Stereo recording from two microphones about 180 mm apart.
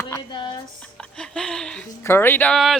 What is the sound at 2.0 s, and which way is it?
Speech, 15° left (ahead or behind).